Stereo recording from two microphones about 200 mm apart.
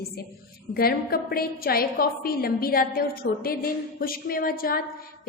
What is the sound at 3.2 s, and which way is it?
Speech, 60° left (ahead or behind).